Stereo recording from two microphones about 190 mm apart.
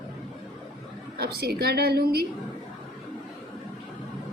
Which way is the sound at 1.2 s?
55° right (ahead or behind).